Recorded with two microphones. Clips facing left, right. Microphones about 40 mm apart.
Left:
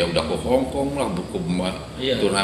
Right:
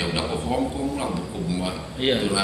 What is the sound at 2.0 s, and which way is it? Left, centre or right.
Speech, right.